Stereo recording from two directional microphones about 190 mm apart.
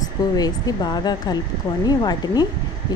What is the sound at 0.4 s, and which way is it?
Speech, 20° left (ahead or behind).